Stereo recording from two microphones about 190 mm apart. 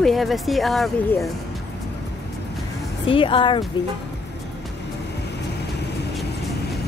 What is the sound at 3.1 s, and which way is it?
Speech, 25° left (ahead or behind).